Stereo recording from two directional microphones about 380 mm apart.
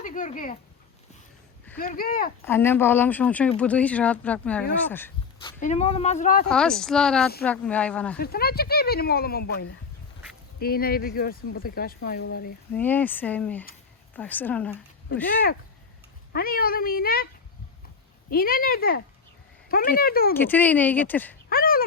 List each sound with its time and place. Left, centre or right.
0.0 s speech: centre
1.8 s speech: left
2.4 s speech: centre; by 6.5 s left
6.5 s speech: centre
8.2 s speech: left
12.7 s speech: centre
16.3 s speech: left
18.3 s speech: left
20.3 s speech: centre
21.5 s a sound: left